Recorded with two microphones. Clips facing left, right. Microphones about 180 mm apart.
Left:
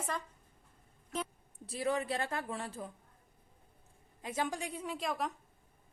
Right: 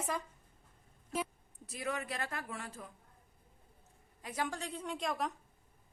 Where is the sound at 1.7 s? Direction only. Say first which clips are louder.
Left 5 dB; 30° left (ahead or behind).